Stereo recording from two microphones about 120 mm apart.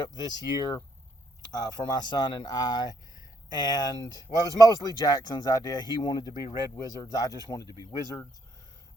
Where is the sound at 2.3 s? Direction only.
40° left (ahead or behind).